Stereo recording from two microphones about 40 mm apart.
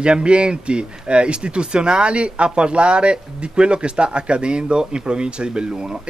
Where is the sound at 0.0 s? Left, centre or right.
Right.